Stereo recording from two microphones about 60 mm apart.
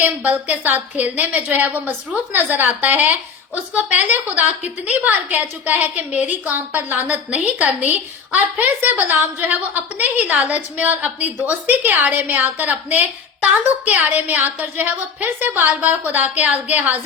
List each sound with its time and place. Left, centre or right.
0.2 s a woman's voice: right